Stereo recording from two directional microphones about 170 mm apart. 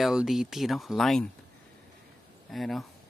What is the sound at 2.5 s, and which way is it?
Speech, centre (ahead or behind).